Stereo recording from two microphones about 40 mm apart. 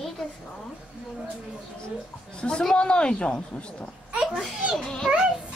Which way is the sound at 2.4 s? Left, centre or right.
Left.